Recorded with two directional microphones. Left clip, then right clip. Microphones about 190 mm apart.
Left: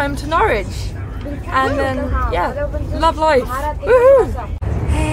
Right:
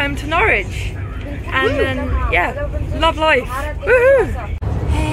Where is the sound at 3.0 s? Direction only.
15° left (ahead or behind).